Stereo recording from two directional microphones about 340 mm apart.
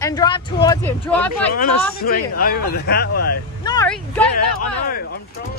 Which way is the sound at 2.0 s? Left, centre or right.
Left.